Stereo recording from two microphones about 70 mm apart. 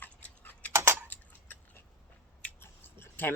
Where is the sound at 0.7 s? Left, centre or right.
Right.